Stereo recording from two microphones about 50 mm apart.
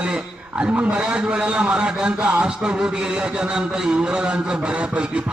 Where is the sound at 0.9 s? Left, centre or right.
Centre.